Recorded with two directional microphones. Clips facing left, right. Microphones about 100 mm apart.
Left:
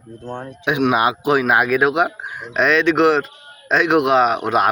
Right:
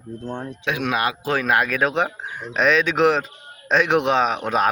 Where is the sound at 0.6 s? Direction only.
20° left (ahead or behind).